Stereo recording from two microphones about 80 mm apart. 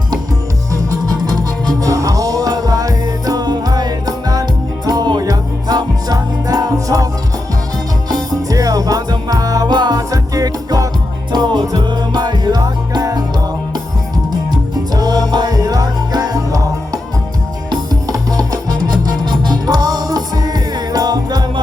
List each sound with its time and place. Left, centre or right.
0.7 s music: right
8.3 s music: right
10.1 s music: right
11.3 s music: right
14.9 s music: right